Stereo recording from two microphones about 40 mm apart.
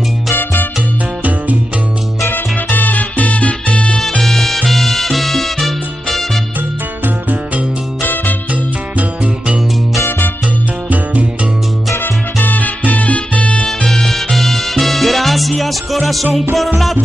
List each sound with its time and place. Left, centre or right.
0.3 s music: left
2.2 s music: left
4.2 s music: centre
4.6 s salsa music: centre
8.0 s music: left
8.9 s music: right
12.0 s music: left
13.7 s salsa music: centre
16.5 s music: centre